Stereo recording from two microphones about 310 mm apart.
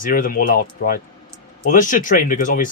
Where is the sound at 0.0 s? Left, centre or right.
Left.